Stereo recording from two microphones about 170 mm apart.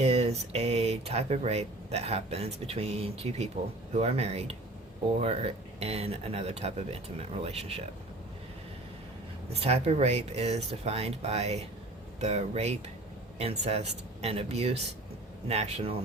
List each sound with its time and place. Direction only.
0.0 s speech: 40° right (ahead or behind)
9.5 s speech: 35° right (ahead or behind)